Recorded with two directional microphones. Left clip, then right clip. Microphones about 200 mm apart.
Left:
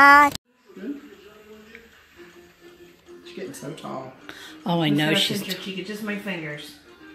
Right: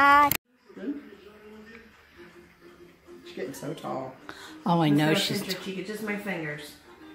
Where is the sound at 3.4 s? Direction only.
5° right (ahead or behind).